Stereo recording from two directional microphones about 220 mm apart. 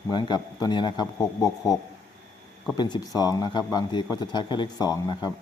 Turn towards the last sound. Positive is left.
turn(degrees=15)  # may be behind; listen again after turning